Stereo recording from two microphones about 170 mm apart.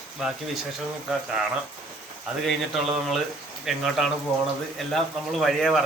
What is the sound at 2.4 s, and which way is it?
Speech, centre (ahead or behind).